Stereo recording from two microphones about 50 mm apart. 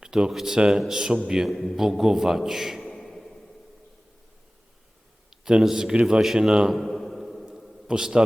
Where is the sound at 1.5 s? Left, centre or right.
Centre.